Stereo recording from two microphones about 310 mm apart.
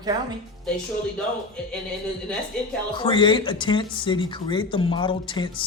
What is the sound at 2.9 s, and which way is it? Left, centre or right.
Speech, centre.